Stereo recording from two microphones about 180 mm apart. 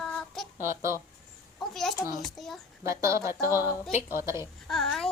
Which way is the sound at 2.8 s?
15° right (ahead or behind).